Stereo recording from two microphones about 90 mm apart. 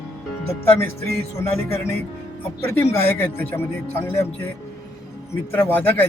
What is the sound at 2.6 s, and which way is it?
Speech, 25° left (ahead or behind).